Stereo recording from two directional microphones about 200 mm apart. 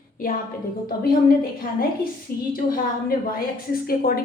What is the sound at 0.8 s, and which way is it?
Speech, 45° left (ahead or behind).